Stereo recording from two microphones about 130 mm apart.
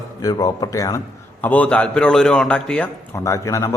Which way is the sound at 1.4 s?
10° left (ahead or behind).